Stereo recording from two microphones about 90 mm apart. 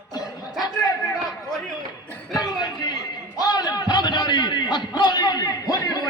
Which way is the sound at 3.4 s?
50° left (ahead or behind).